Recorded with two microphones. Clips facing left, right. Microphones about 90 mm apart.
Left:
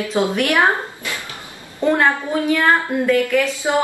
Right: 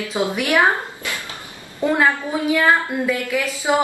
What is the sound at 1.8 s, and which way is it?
A woman's voice, 5° right (ahead or behind).